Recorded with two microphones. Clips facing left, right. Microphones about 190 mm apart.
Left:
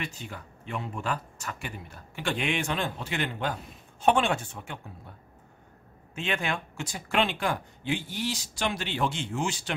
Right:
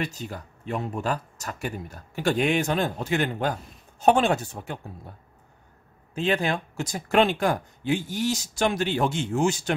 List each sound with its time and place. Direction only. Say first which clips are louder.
0.0 s speech: right 6 dB; 40° right (ahead or behind)
6.1 s speech: right 6 dB; 35° right (ahead or behind)